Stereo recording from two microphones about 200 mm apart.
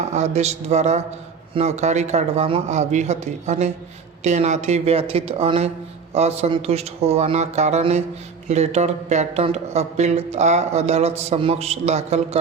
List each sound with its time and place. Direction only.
0.1 s speech: 35° right (ahead or behind)